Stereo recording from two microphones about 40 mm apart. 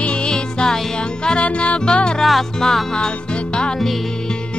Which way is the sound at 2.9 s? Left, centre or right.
Left.